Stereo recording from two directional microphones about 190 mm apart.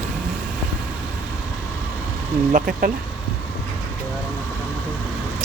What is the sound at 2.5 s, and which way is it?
Speech, 45° right (ahead or behind).